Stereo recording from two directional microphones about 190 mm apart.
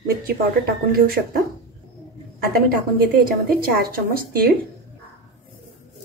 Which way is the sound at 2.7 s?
50° right (ahead or behind).